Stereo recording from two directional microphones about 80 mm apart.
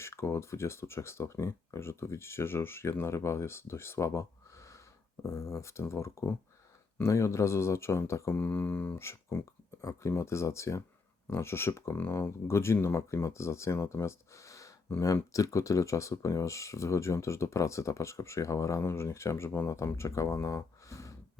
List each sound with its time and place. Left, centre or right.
0.0 s speech: left
8.4 s speech: left